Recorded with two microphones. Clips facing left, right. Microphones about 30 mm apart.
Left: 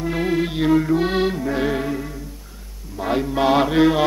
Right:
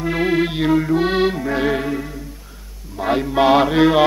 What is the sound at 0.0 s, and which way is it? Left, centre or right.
Music, right.